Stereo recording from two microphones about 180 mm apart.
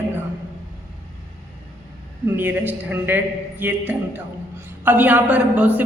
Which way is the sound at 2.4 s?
10° right (ahead or behind).